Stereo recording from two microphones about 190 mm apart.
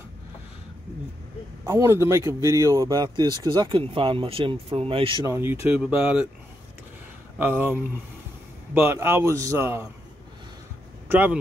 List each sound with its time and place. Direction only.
1.7 s speech: 15° right (ahead or behind)
5.2 s a man's voice: 15° right (ahead or behind)
7.3 s a man's voice: 10° right (ahead or behind)
11.1 s speech: 10° right (ahead or behind)